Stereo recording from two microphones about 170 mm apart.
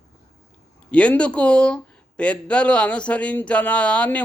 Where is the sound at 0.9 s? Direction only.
5° left (ahead or behind).